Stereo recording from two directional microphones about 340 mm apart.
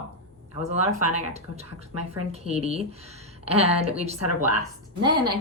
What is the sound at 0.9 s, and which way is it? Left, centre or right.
Speech, left.